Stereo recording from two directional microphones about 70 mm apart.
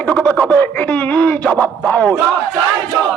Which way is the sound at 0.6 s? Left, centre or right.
Left.